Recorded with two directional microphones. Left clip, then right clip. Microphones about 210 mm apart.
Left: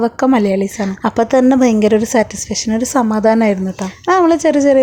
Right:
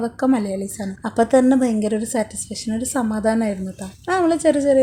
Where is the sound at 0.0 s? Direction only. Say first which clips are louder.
Left 7 dB; 30° left (ahead or behind).